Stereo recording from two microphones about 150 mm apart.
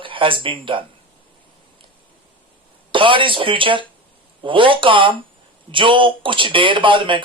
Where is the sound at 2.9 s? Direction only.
35° right (ahead or behind).